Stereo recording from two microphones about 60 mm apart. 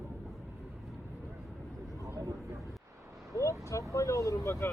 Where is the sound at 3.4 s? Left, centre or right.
Left.